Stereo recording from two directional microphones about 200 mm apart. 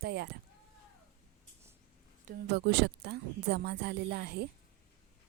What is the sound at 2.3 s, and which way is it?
A woman's voice, 55° right (ahead or behind).